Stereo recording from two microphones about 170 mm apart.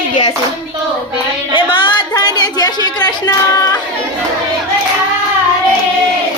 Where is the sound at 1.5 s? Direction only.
30° left (ahead or behind).